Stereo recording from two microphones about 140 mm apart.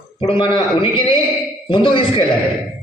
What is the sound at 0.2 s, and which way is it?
A man's voice, 40° left (ahead or behind).